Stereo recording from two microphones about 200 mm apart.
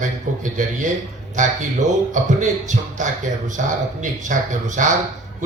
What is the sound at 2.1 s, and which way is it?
A man's voice, 40° right (ahead or behind).